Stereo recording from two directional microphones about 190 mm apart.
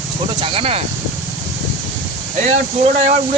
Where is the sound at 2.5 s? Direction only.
40° right (ahead or behind).